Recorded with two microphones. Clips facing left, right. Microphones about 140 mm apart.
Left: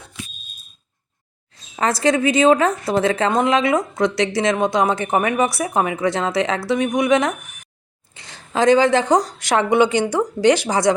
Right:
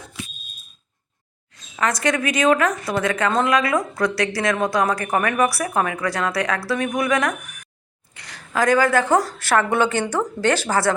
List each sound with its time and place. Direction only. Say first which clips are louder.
1.7 s speech: left 4 dB; 30° left (ahead or behind)